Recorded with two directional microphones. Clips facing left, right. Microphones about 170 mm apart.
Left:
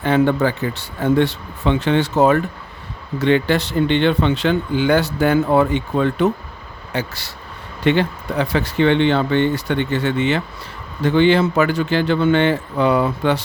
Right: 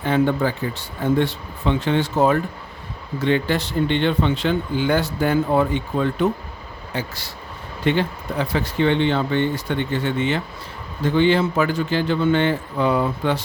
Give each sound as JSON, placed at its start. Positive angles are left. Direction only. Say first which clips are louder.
{"t": 0.0, "sound": "speech", "louder": "left 3 dB", "side_deg": 75}